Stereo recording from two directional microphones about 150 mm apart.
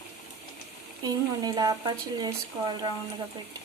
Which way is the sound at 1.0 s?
25° right (ahead or behind).